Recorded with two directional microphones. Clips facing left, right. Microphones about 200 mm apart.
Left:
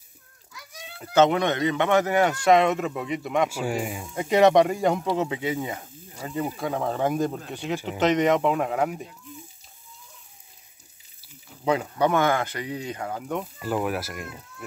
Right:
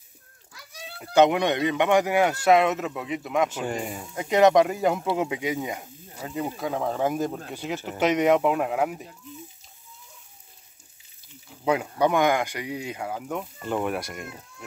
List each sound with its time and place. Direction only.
0.5 s children playing: 35° right (ahead or behind)
0.9 s speech: 15° right (ahead or behind)
6.5 s speech: 5° right (ahead or behind)
11.6 s speech: 10° right (ahead or behind)